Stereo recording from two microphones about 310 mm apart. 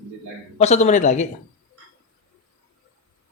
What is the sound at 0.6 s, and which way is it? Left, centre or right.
Speech, left.